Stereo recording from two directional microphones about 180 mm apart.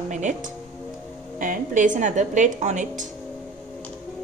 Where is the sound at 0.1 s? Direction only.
45° right (ahead or behind).